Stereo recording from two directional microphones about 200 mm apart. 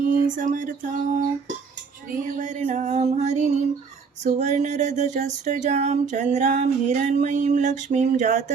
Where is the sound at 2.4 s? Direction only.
40° right (ahead or behind).